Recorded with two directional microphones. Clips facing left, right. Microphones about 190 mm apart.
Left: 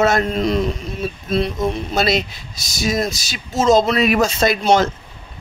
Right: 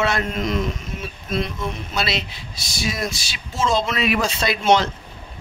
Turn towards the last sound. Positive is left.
turn(degrees=45)  # may be behind; listen again after turning